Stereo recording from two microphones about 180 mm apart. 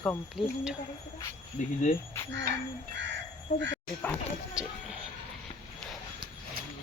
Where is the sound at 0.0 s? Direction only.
Centre (ahead or behind).